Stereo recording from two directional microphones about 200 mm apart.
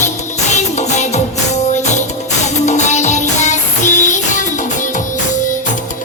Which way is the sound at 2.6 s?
35° left (ahead or behind).